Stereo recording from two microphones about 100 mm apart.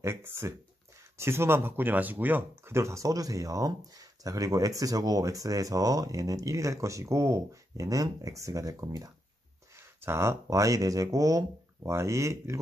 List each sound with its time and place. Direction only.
0.0 s speech: 25° right (ahead or behind)